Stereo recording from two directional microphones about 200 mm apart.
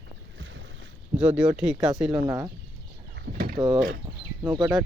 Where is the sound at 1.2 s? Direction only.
5° right (ahead or behind).